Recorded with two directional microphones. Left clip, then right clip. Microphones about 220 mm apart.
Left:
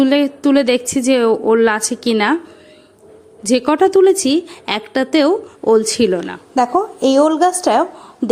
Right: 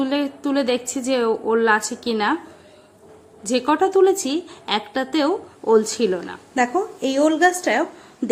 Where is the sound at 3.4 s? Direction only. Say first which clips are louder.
Left 5 dB; 30° left (ahead or behind).